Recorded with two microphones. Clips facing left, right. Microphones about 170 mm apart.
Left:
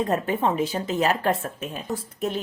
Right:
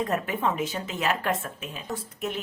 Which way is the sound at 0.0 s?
30° left (ahead or behind).